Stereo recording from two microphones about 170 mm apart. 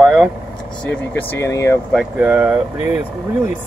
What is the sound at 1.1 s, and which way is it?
Speech, 15° left (ahead or behind).